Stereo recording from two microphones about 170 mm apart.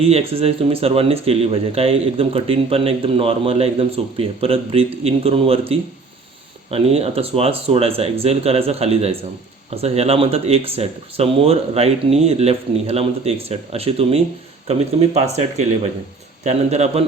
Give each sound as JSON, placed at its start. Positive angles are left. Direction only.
{"t": 0.0, "sound": "speech", "side_deg": -35}